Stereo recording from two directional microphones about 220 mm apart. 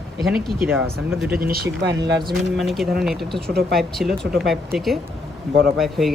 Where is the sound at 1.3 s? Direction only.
45° right (ahead or behind).